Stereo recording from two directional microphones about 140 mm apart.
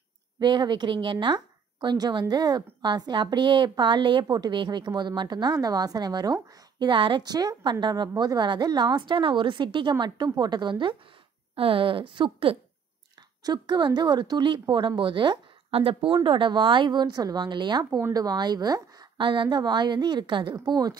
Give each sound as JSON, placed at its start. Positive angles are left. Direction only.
{"t": 0.4, "sound": "a woman's voice", "side_deg": -30}